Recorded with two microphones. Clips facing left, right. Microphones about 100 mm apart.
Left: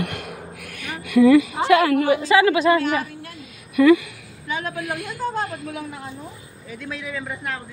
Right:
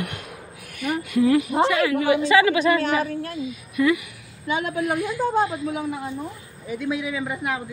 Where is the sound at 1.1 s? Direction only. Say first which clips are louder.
Left 6 dB; 70° left (ahead or behind).